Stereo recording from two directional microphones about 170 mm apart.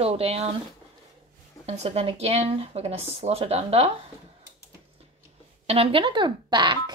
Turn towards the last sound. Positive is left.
turn(degrees=-25)  # may be behind; listen again after turning